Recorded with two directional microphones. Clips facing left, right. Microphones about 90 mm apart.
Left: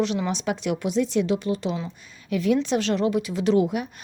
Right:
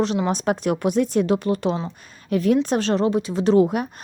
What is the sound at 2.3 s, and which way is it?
Speech, 45° right (ahead or behind).